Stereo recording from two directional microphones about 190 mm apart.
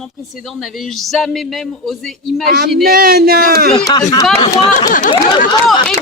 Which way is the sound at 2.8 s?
50° right (ahead or behind).